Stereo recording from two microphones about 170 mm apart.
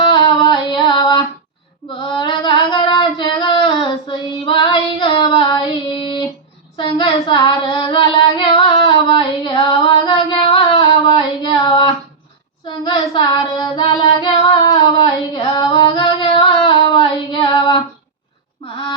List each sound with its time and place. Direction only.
0.0 s music: 25° left (ahead or behind)
2.0 s female singing: 30° left (ahead or behind)
6.7 s child singing: 30° left (ahead or behind)